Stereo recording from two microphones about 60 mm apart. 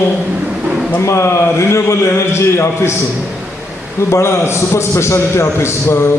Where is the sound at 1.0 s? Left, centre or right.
Left.